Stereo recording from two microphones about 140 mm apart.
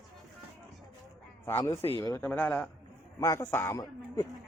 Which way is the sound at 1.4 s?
20° left (ahead or behind).